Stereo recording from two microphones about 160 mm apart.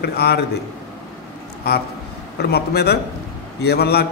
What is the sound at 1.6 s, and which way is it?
Speech, 80° left.